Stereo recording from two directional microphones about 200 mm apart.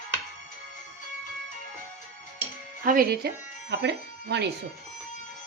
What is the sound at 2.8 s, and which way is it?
Speech, 45° right (ahead or behind).